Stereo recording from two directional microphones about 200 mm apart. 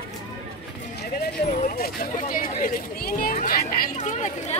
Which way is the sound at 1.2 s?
45° left (ahead or behind).